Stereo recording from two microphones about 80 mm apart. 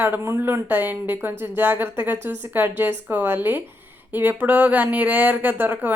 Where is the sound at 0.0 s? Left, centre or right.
Right.